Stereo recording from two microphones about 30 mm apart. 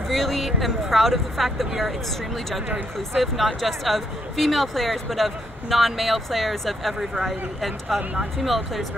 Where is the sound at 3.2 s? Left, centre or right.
Centre.